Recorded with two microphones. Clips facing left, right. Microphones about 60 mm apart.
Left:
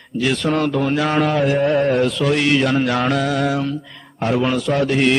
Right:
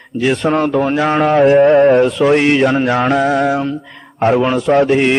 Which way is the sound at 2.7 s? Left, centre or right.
Centre.